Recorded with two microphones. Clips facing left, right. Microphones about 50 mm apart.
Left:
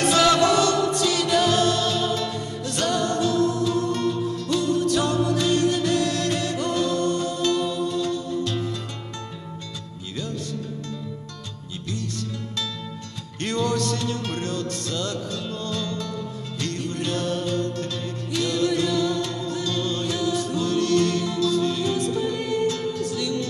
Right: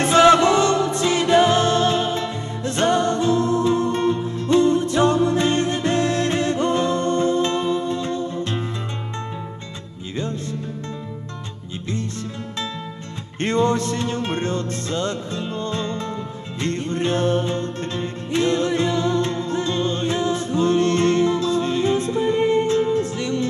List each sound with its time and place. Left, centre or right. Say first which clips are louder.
0.0 s music: right 5 dB; right
10.1 s music: right 4 dB; right
13.4 s music: right 5 dB; right